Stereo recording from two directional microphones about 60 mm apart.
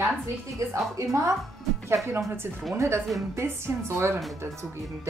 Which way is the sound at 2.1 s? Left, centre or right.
Right.